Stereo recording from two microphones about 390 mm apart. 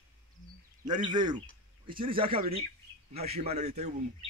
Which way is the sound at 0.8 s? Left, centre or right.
Centre.